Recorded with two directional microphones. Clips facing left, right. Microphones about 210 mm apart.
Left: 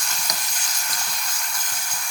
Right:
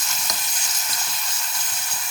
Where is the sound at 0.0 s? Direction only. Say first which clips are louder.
Even; 5° right (ahead or behind).